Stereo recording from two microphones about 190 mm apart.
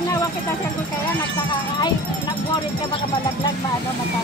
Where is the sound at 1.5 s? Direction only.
25° left (ahead or behind).